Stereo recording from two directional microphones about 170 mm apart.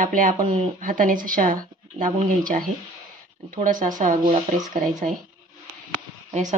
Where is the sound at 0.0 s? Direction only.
50° right (ahead or behind).